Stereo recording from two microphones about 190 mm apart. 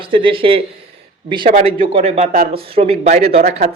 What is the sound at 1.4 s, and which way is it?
Speech, 40° right (ahead or behind).